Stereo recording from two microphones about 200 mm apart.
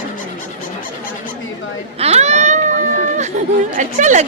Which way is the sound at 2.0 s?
30° right (ahead or behind).